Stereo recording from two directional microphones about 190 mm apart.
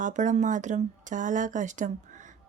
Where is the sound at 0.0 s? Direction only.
40° right (ahead or behind).